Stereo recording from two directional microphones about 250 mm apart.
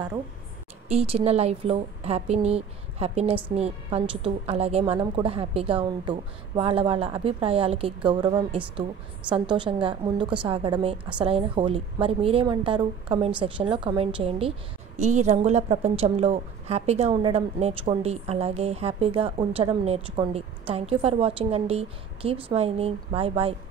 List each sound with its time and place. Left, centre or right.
0.8 s a woman's voice: right